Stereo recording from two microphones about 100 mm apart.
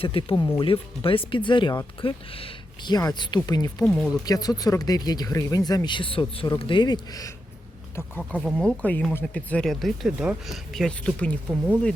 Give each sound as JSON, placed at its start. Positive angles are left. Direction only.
{"t": 0.0, "sound": "speech", "side_deg": 65}
{"t": 2.0, "sound": "speech", "side_deg": 65}
{"t": 2.8, "sound": "speech", "side_deg": 40}
{"t": 3.8, "sound": "speech", "side_deg": 10}
{"t": 4.1, "sound": "speech", "side_deg": 40}
{"t": 8.2, "sound": "speech", "side_deg": 5}
{"t": 9.6, "sound": "speech", "side_deg": 0}